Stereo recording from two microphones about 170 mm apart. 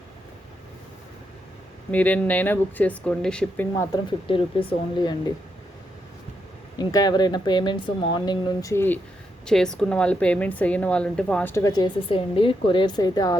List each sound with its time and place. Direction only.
1.9 s speech: 10° left (ahead or behind)
4.3 s speech: 30° left (ahead or behind)
6.7 s speech: 20° left (ahead or behind)
9.5 s a woman's voice: 5° left (ahead or behind)
11.5 s speech: 20° left (ahead or behind)